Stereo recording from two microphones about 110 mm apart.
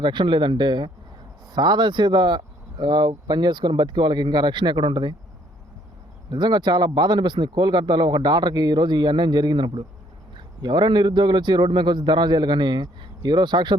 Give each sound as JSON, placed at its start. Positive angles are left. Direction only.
{"t": 0.0, "sound": "a man's voice", "side_deg": -45}
{"t": 6.3, "sound": "a man's voice", "side_deg": -40}